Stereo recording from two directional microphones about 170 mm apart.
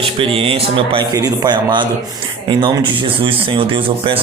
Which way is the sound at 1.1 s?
20° right (ahead or behind).